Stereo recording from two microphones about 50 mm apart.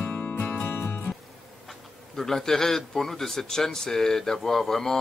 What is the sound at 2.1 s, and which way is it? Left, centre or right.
Speech, centre.